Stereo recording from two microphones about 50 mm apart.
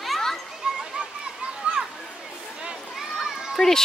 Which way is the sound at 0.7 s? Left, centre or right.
Centre.